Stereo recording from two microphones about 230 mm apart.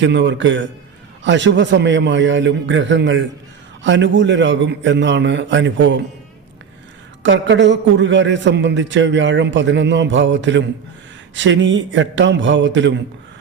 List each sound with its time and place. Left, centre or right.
0.0 s a man's voice: right
7.2 s a man's voice: right